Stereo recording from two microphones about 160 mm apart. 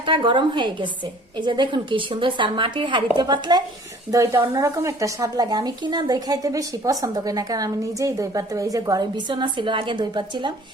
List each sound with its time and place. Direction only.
0.0 s a woman's voice: 30° right (ahead or behind)